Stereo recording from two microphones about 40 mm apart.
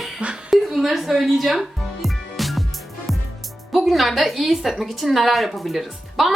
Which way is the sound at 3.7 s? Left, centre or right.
Centre.